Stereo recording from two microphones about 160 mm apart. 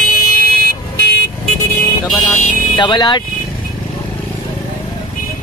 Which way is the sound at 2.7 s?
30° left (ahead or behind).